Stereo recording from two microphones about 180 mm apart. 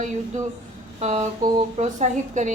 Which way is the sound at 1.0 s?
40° right (ahead or behind).